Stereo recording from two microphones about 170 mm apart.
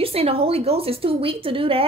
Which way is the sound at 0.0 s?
35° right (ahead or behind).